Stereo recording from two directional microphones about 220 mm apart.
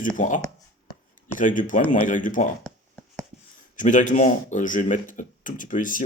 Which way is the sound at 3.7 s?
35° left (ahead or behind).